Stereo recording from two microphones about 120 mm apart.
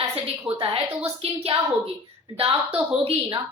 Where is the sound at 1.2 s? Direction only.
55° right (ahead or behind).